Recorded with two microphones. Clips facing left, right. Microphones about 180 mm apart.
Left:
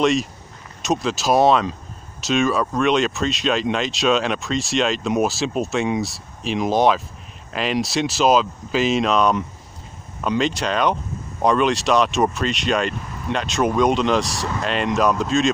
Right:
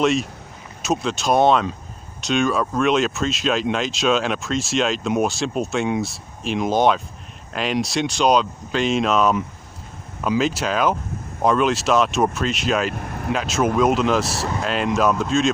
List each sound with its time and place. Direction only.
0.0 s speech: centre (ahead or behind)
12.9 s vehicle: 60° right (ahead or behind)
13.3 s speech: 5° right (ahead or behind)